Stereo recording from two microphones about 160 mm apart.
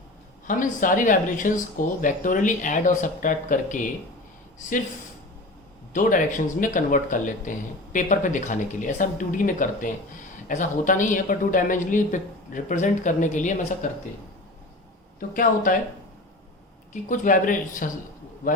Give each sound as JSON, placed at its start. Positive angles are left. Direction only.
{"t": 0.4, "sound": "a woman's voice", "side_deg": 55}
{"t": 5.9, "sound": "a woman's voice", "side_deg": 55}
{"t": 15.3, "sound": "speech", "side_deg": 60}
{"t": 16.9, "sound": "speech", "side_deg": 55}